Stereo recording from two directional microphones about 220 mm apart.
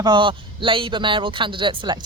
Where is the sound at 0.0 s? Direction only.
20° right (ahead or behind).